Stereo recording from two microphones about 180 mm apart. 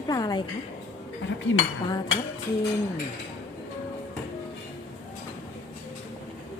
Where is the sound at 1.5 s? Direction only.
90° left.